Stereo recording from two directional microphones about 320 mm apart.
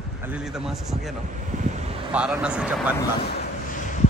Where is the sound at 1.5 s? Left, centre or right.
Right.